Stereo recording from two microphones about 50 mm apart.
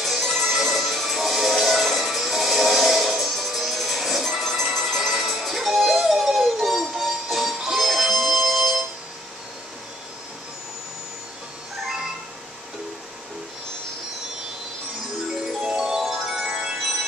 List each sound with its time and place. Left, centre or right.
0.0 s music: centre
15.6 s music: centre
16.4 s music: right